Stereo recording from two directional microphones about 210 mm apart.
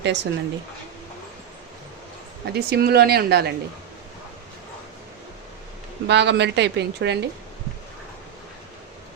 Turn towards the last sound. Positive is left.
turn(degrees=-55)  # may be behind; listen again after turning